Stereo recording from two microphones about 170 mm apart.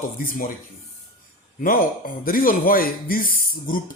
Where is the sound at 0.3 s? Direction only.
55° left (ahead or behind).